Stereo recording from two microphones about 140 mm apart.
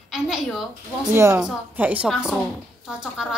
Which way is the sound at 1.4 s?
10° right (ahead or behind).